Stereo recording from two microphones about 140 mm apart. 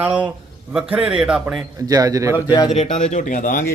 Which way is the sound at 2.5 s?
30° left (ahead or behind).